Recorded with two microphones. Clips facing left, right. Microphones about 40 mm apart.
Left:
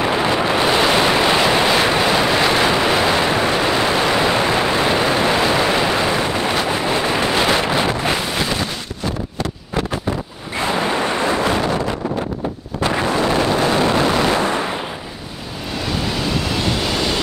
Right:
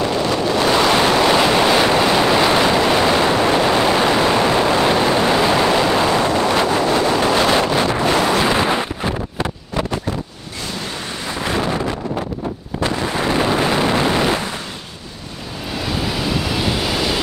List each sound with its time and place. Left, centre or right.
0.0 s a sound: left
0.7 s waves: centre
6.4 s wind noise: centre
8.5 s a sound: right
10.6 s waves: left
13.5 s vehicle: centre
15.8 s waves: centre